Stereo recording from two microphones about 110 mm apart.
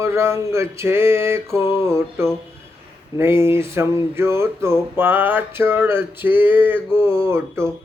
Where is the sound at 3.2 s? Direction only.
25° right (ahead or behind).